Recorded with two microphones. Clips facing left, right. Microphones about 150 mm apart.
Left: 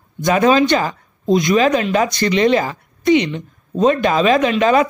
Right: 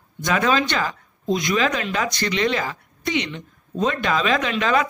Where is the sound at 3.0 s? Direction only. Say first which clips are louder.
Left 11 dB; 15° left (ahead or behind).